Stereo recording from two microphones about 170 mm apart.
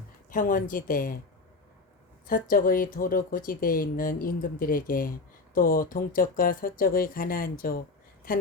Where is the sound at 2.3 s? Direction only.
55° left (ahead or behind).